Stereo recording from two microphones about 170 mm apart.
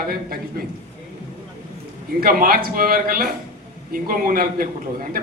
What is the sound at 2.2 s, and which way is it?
A man's voice, 55° right (ahead or behind).